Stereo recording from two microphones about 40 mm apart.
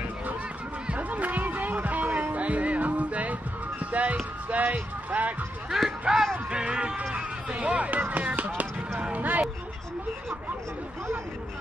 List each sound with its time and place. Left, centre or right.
0.8 s music: right
3.8 s speech: right
5.7 s speech: centre
7.5 s speech: right